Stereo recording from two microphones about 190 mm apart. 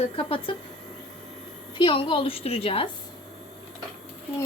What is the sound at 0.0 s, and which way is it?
Speech, 30° left (ahead or behind).